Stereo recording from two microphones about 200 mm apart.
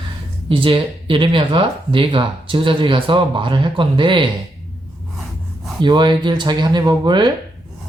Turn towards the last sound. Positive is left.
turn(degrees=-20)  # may be behind; listen again after turning